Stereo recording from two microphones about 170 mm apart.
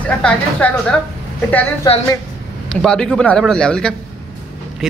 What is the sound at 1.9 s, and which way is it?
Speech, 30° left (ahead or behind).